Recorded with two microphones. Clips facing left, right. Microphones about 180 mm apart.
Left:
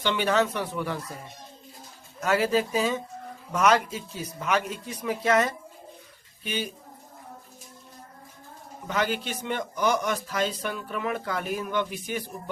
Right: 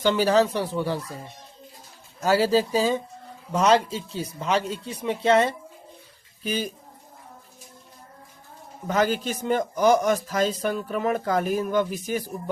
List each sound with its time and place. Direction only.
0.0 s speech: 35° right (ahead or behind)
2.2 s speech: 30° right (ahead or behind)
6.4 s speech: 40° right (ahead or behind)
8.9 s speech: 40° right (ahead or behind)